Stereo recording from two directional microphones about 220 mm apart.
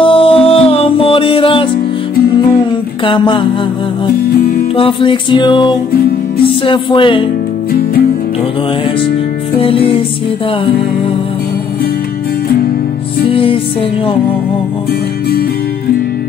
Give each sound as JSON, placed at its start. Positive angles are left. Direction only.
{"t": 0.0, "sound": "music", "side_deg": 25}
{"t": 3.1, "sound": "music", "side_deg": 20}
{"t": 4.7, "sound": "music", "side_deg": 25}
{"t": 9.6, "sound": "music", "side_deg": 25}
{"t": 13.3, "sound": "music", "side_deg": 25}